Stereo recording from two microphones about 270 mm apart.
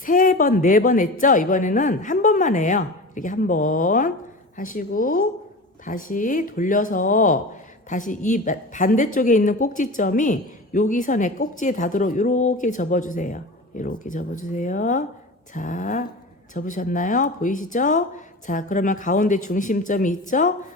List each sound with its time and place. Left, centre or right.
0.0 s a woman's voice: left